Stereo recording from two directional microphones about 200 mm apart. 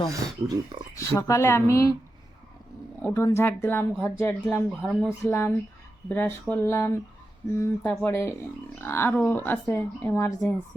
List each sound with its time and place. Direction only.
0.1 s speech: 20° right (ahead or behind)
0.9 s speech: 15° left (ahead or behind)
3.0 s speech: 15° left (ahead or behind)